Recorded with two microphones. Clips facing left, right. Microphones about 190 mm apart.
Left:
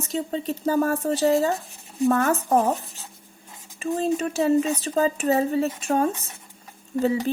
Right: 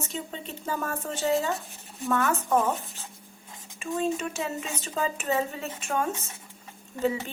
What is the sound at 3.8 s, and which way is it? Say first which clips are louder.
Speech: left 5 dB; 35° left (ahead or behind).